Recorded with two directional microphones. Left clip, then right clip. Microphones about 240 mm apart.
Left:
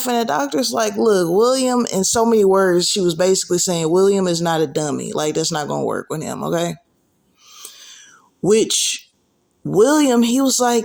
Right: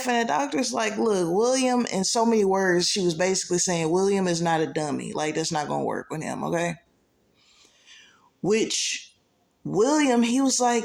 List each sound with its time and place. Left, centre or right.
0.0 s speech: left
7.4 s a sound: left
9.6 s speech: left